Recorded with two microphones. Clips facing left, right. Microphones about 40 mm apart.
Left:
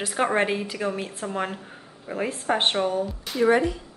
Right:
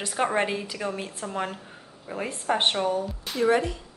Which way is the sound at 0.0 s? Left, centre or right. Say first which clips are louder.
Left 2 dB; centre.